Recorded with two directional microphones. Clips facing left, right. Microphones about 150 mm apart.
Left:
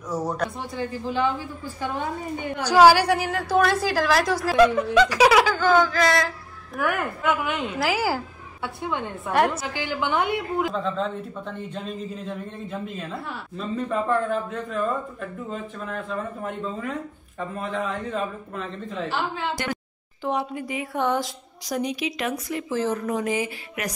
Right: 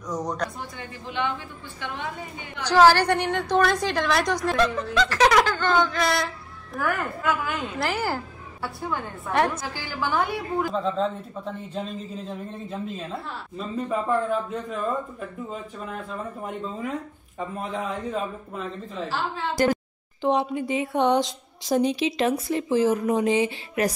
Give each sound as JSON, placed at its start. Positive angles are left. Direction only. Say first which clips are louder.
{"t": 0.1, "sound": "a woman's voice", "louder": "left 2 dB", "side_deg": 5}
{"t": 0.7, "sound": "a woman's voice", "louder": "left 6 dB", "side_deg": 35}
{"t": 2.6, "sound": "a woman's voice", "louder": "left 2 dB", "side_deg": 10}
{"t": 6.8, "sound": "a woman's voice", "louder": "left 2 dB", "side_deg": 20}
{"t": 7.8, "sound": "a woman's voice", "louder": "left 3 dB", "side_deg": 5}
{"t": 8.8, "sound": "a woman's voice", "louder": "left 2 dB", "side_deg": 25}
{"t": 9.3, "sound": "a woman's voice", "louder": "left 2 dB", "side_deg": 5}
{"t": 9.8, "sound": "a woman's voice", "louder": "left 1 dB", "side_deg": 20}
{"t": 10.7, "sound": "a woman's voice", "louder": "right 1 dB", "side_deg": 0}
{"t": 13.6, "sound": "speech", "louder": "left 1 dB", "side_deg": -5}
{"t": 18.1, "sound": "speech", "louder": "left 1 dB", "side_deg": -5}
{"t": 19.5, "sound": "speech", "louder": "right 7 dB", "side_deg": -35}
{"t": 20.2, "sound": "a woman's voice", "louder": "right 4 dB", "side_deg": -20}
{"t": 22.7, "sound": "a woman's voice", "louder": "right 4 dB", "side_deg": -15}